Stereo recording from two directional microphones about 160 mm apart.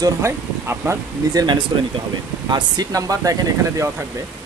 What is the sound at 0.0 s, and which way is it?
Speech, 15° right (ahead or behind).